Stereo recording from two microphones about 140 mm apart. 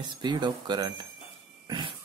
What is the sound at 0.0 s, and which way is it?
Speech, 30° right (ahead or behind).